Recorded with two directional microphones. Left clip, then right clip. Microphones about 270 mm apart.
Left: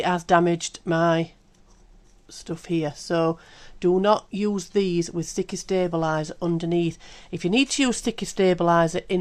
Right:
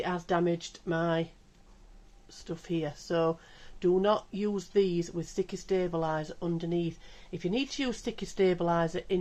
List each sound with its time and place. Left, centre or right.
0.0 s speech: left
2.3 s speech: left